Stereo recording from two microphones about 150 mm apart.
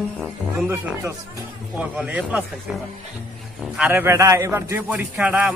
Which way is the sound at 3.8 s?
15° right (ahead or behind).